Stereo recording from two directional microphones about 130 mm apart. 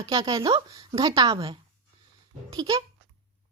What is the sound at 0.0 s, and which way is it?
A woman's voice, 30° right (ahead or behind).